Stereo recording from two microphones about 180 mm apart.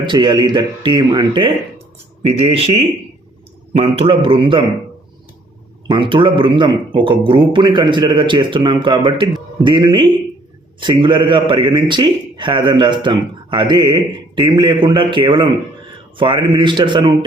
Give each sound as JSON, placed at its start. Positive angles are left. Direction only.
{"t": 0.0, "sound": "a man's voice", "side_deg": -25}
{"t": 3.8, "sound": "a man's voice", "side_deg": -30}
{"t": 5.9, "sound": "a man's voice", "side_deg": -25}